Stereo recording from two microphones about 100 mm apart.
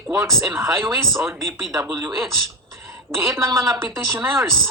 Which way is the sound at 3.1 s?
25° right (ahead or behind).